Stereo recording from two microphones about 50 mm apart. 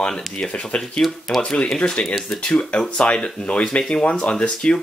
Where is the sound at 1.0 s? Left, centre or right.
Centre.